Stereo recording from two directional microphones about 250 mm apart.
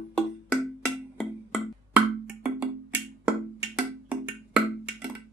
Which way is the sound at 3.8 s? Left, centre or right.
Centre.